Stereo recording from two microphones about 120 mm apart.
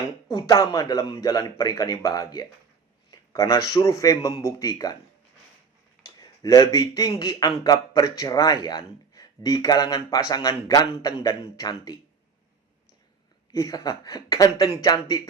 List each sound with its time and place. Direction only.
0.3 s a man's voice: 30° left (ahead or behind)
6.0 s a sound: 30° left (ahead or behind)
7.2 s a man's voice: 35° left (ahead or behind)
13.5 s a man's voice: 30° left (ahead or behind)